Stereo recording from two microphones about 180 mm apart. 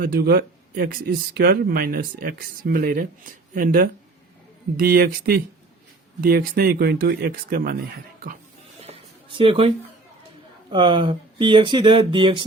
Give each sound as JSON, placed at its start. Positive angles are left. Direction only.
{"t": 0.0, "sound": "speech", "side_deg": -60}
{"t": 8.8, "sound": "a sound", "side_deg": -30}
{"t": 10.7, "sound": "speech", "side_deg": -25}